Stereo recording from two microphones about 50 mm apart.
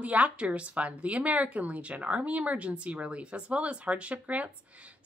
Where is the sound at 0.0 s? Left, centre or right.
Right.